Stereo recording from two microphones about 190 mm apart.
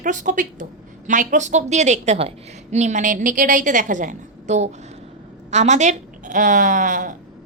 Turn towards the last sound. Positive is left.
turn(degrees=-45)  # may be behind; listen again after turning